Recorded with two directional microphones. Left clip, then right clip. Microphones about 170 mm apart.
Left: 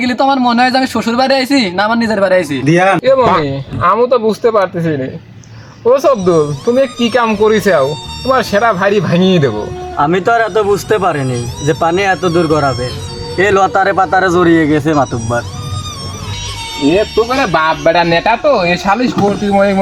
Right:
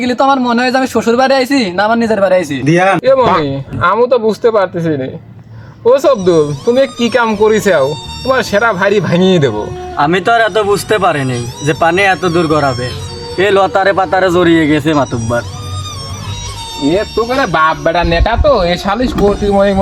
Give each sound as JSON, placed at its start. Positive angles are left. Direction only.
{"t": 0.0, "sound": "speech", "side_deg": 5}
{"t": 10.0, "sound": "a man's voice", "side_deg": -10}
{"t": 11.3, "sound": "speech", "side_deg": 0}
{"t": 13.4, "sound": "a man's voice", "side_deg": -15}
{"t": 16.8, "sound": "speech", "side_deg": 0}